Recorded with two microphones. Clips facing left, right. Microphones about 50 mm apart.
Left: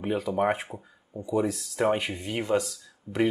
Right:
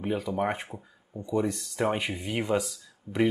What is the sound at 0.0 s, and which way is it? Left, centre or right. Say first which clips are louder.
Speech: left 3 dB; centre.